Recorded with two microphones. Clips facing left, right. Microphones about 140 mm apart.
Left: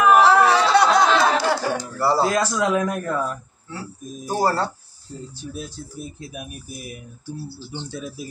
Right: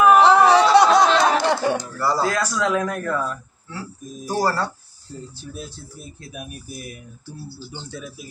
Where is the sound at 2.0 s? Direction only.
30° left (ahead or behind).